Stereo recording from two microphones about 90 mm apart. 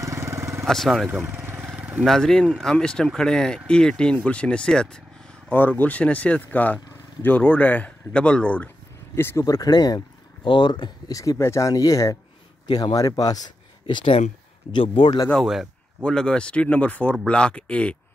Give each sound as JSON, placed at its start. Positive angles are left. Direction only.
{"t": 0.0, "sound": "vehicle", "side_deg": -30}
{"t": 0.7, "sound": "speech", "side_deg": 5}
{"t": 1.2, "sound": "vehicle", "side_deg": -25}
{"t": 1.8, "sound": "vehicle", "side_deg": -15}
{"t": 2.0, "sound": "speech", "side_deg": 5}
{"t": 9.1, "sound": "speech", "side_deg": 25}
{"t": 9.4, "sound": "speech", "side_deg": 45}
{"t": 10.4, "sound": "speech", "side_deg": 60}
{"t": 11.1, "sound": "speech", "side_deg": 35}
{"t": 12.6, "sound": "a man's voice", "side_deg": 55}
{"t": 13.8, "sound": "speech", "side_deg": 75}
{"t": 15.4, "sound": "speech", "side_deg": -5}
{"t": 16.0, "sound": "speech", "side_deg": 10}